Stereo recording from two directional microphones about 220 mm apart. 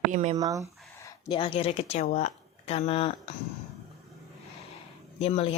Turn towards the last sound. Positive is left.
turn(degrees=25)  # may be behind; listen again after turning